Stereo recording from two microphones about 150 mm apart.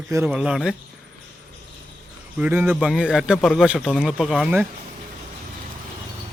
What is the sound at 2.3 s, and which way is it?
A man's voice, 10° right (ahead or behind).